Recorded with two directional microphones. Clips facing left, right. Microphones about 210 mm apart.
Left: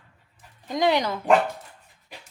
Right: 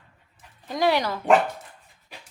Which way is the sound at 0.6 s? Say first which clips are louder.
Even; 20° left (ahead or behind).